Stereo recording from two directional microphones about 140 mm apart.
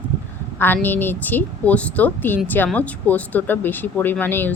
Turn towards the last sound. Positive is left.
turn(degrees=15)  # may be behind; listen again after turning